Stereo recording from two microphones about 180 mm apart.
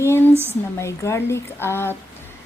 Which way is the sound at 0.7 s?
15° left (ahead or behind).